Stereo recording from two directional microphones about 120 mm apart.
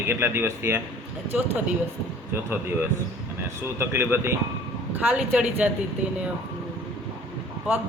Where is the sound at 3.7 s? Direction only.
20° right (ahead or behind).